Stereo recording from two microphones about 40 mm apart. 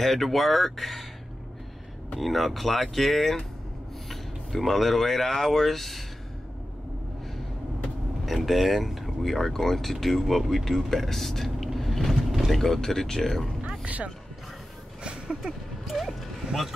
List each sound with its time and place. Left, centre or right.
0.0 s speech: centre
2.1 s speech: centre
8.3 s speech: centre
13.8 s speech: right
15.0 s a sound: right
15.4 s speech: centre